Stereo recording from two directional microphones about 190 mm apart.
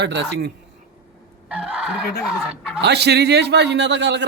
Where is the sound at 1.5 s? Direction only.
5° right (ahead or behind).